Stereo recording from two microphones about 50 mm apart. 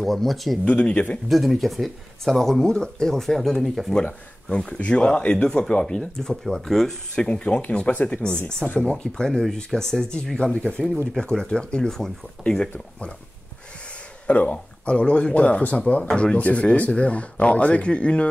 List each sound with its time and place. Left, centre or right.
0.0 s speech: centre
0.7 s speech: left
1.3 s speech: centre
3.9 s speech: left; by 7.0 s centre
7.2 s speech: centre
8.9 s speech: centre
10.5 s speech: left
11.1 s speech: centre
14.2 s speech: left